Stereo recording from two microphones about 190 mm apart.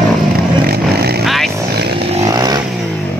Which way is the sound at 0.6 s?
55° right (ahead or behind).